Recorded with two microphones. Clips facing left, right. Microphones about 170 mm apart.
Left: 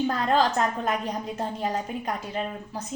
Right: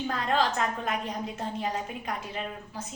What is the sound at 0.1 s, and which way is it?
A woman's voice, 40° left (ahead or behind).